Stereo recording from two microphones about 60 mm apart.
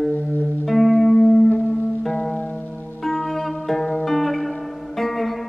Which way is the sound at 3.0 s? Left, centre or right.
Centre.